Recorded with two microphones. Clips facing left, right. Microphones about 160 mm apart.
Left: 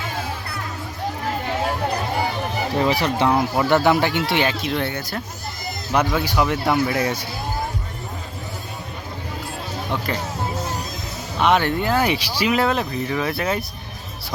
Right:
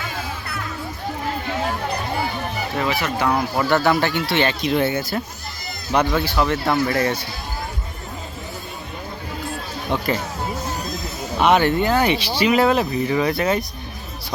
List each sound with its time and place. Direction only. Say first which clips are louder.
2.7 s speech: left 3 dB; 30° left (ahead or behind)
3.2 s speech: left 1 dB; 15° left (ahead or behind)
4.4 s speech: right 3 dB; centre (ahead or behind)
5.9 s speech: right 1 dB; 5° left (ahead or behind)
11.3 s speech: right 2 dB; 5° right (ahead or behind)